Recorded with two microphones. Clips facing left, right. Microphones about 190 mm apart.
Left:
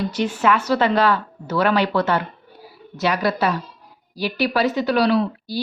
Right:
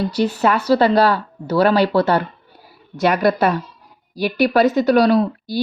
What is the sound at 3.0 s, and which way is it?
Speech, 50° right (ahead or behind).